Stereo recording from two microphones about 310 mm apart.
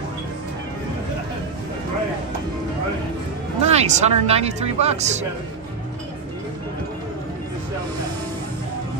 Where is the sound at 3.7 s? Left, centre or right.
Right.